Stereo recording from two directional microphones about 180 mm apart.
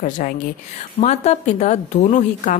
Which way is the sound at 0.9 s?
35° left (ahead or behind).